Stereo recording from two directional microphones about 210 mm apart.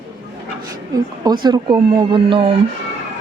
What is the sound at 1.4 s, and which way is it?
Speech, 20° right (ahead or behind).